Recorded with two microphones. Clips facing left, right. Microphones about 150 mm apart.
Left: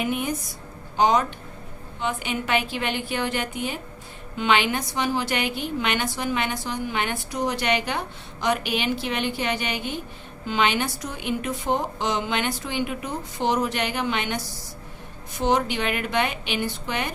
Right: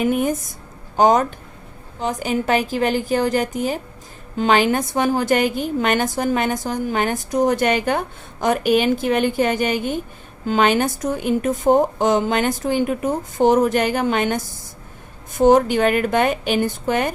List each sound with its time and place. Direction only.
0.0 s a woman's voice: 45° right (ahead or behind)